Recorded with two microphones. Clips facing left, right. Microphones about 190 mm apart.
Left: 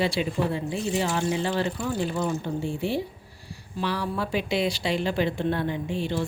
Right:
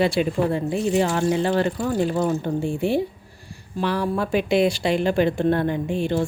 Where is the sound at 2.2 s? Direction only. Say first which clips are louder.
Right 5 dB; 50° right (ahead or behind).